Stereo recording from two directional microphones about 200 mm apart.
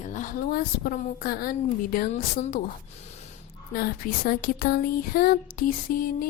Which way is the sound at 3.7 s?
50° left (ahead or behind).